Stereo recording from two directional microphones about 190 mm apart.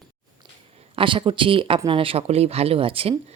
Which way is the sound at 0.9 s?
25° right (ahead or behind).